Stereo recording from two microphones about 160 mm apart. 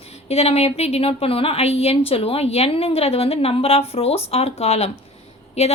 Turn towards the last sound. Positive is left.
turn(degrees=40)  # may be behind; listen again after turning